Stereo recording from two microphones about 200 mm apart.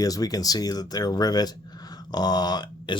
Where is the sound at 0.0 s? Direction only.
20° left (ahead or behind).